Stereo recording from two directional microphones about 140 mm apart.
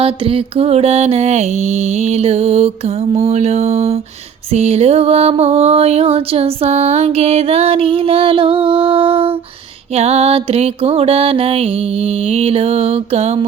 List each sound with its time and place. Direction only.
0.0 s mantra: 40° right (ahead or behind)